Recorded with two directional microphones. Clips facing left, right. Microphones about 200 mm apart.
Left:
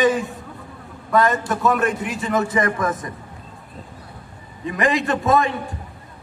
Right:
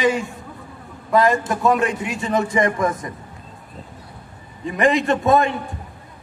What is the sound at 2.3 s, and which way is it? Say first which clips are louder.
Speech: right 1 dB; 20° right (ahead or behind).